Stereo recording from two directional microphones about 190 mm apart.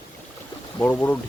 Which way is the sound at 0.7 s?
15° left (ahead or behind).